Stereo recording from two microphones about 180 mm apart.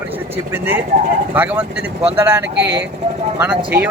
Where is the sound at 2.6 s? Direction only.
80° right.